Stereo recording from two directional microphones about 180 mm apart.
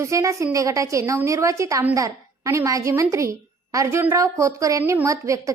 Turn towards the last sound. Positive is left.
turn(degrees=-15)  # may be behind; listen again after turning